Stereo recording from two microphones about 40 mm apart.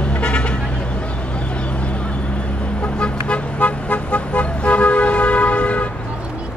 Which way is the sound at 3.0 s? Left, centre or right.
Left.